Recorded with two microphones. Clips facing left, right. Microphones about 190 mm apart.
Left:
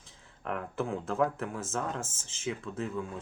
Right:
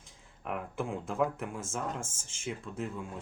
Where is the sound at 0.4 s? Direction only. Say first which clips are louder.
Left 2 dB; 10° right (ahead or behind).